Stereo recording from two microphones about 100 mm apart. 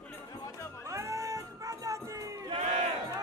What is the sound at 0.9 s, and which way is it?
Cat, 30° right (ahead or behind).